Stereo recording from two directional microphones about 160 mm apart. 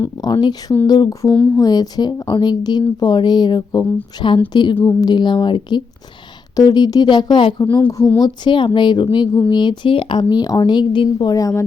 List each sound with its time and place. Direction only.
0.0 s speech: 25° left (ahead or behind)